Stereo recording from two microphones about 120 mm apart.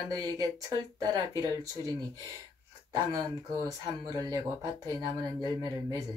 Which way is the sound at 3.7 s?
30° right (ahead or behind).